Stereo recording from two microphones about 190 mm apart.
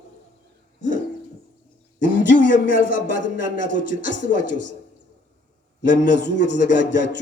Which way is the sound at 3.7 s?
45° left (ahead or behind).